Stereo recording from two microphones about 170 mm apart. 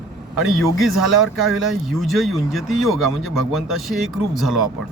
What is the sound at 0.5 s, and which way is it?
Speech, centre (ahead or behind).